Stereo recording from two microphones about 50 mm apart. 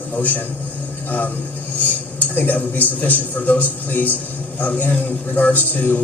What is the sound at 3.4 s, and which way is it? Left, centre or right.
A man's voice, left.